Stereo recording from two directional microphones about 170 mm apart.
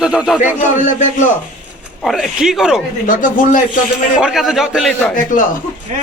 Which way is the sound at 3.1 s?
50° left (ahead or behind).